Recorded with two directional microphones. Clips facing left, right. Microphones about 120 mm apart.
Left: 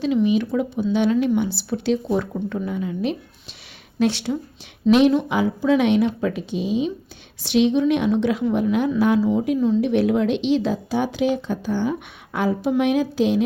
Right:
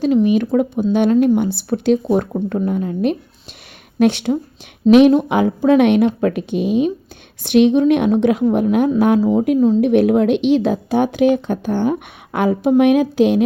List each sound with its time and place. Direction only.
0.0 s a woman's voice: 45° right (ahead or behind)